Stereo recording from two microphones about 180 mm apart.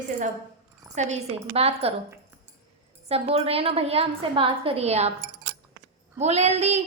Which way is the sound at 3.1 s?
35° right (ahead or behind).